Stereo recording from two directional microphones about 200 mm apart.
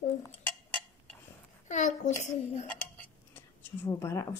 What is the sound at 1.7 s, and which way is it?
A child's voice, 40° left (ahead or behind).